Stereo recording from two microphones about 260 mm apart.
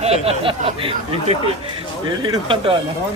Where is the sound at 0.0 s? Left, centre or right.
Right.